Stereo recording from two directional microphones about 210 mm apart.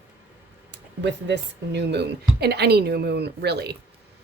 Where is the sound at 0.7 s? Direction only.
55° right (ahead or behind).